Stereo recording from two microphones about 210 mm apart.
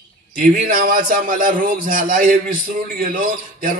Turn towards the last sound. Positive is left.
turn(degrees=-40)  # may be behind; listen again after turning